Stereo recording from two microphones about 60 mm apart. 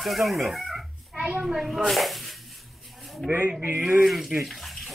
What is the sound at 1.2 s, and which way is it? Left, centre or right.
Speech, centre.